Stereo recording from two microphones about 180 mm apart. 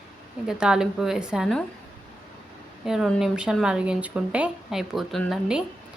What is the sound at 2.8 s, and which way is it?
A woman's voice, centre (ahead or behind).